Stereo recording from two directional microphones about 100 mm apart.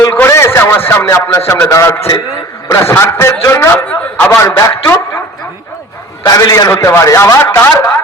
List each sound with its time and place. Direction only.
0.1 s a sound: 25° left (ahead or behind)
1.6 s a man's voice: 30° left (ahead or behind)
3.8 s speech: 15° left (ahead or behind)
4.4 s a man's voice: 35° left (ahead or behind)
6.2 s a man's voice: 35° left (ahead or behind)